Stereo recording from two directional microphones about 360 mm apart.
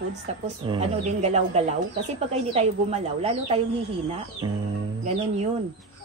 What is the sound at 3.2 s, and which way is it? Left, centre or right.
Speech, centre.